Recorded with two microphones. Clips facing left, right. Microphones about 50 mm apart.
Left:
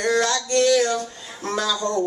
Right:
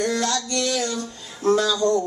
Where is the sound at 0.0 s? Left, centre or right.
Left.